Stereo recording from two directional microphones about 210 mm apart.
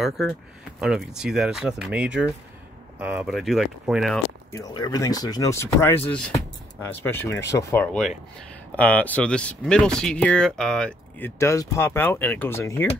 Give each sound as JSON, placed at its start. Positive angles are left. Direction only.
{"t": 0.7, "sound": "speech", "side_deg": -5}
{"t": 4.5, "sound": "speech", "side_deg": 15}